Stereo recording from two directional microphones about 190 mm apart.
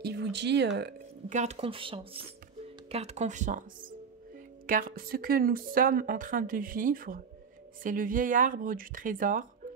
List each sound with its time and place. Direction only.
0.0 s speech: 60° right (ahead or behind)
1.3 s speech: 35° right (ahead or behind)